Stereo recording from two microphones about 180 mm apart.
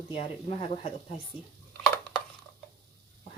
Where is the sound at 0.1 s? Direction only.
30° left (ahead or behind).